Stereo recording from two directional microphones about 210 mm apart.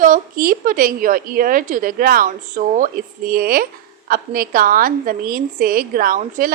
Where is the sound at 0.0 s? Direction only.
40° right (ahead or behind).